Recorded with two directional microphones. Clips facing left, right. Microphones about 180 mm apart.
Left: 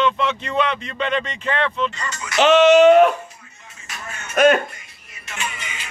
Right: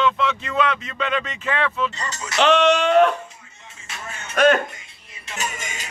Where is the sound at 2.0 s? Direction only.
35° right (ahead or behind).